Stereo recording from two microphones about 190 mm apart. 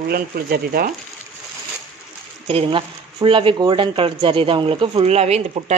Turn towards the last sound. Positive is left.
turn(degrees=-35)  # may be behind; listen again after turning